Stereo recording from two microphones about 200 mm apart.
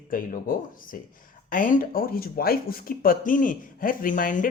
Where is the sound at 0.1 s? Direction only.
45° left (ahead or behind).